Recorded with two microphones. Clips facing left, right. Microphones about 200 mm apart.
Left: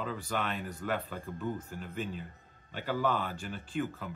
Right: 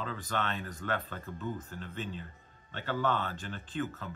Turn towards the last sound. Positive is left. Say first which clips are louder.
# left 1 dB
turn(degrees=10)  # may be behind; listen again after turning